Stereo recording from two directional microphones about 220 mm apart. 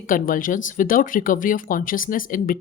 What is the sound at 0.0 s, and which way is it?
A woman's voice, 40° left (ahead or behind).